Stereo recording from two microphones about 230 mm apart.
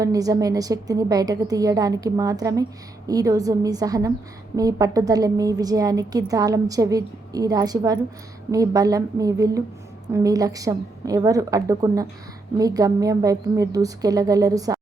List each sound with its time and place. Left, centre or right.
0.0 s a woman's voice: centre